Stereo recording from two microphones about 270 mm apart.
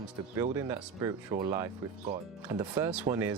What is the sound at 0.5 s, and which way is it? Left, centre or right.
Speech, centre.